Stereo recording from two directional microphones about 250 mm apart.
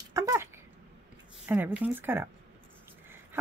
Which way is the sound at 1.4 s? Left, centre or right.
Centre.